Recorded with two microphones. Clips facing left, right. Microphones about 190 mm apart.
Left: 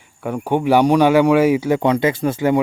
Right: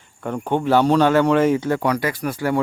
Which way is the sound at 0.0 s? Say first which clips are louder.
Left 2 dB; 10° left (ahead or behind).